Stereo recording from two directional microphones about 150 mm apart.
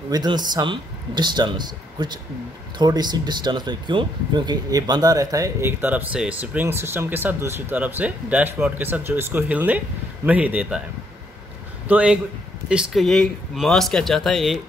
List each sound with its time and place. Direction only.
0.1 s speech: 30° right (ahead or behind); by 10.8 s 10° right (ahead or behind)
11.9 s speech: 10° right (ahead or behind)